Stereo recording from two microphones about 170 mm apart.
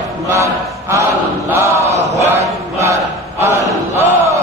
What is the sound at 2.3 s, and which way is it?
Chant, 15° right (ahead or behind).